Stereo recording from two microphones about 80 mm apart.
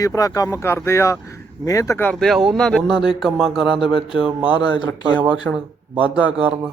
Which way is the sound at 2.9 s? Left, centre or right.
Centre.